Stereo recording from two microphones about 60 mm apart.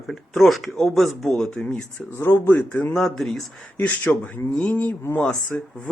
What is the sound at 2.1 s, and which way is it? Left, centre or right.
Speech, left.